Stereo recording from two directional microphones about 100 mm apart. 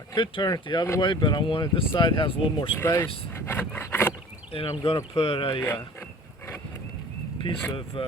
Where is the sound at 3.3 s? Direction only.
25° left (ahead or behind).